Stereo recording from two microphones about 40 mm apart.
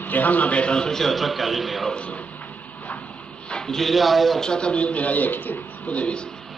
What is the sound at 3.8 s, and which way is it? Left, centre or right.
Speech, centre.